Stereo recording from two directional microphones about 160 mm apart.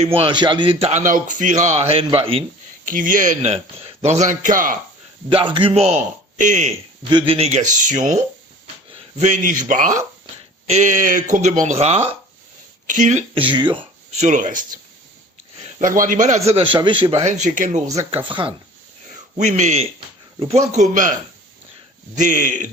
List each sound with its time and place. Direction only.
0.0 s a man's voice: 40° right (ahead or behind)
2.8 s speech: 55° right (ahead or behind)
5.3 s a man's voice: 30° right (ahead or behind); by 6.7 s 50° right (ahead or behind)
7.1 s speech: 30° right (ahead or behind); by 13.2 s 50° right (ahead or behind)
13.3 s a man's voice: 30° right (ahead or behind)
14.1 s speech: 45° right (ahead or behind)
15.6 s a man's voice: 55° right (ahead or behind)
16.5 s a man's voice: 35° right (ahead or behind); by 17.8 s 50° right (ahead or behind)
18.3 s a man's voice: 30° right (ahead or behind)
19.4 s speech: 45° right (ahead or behind)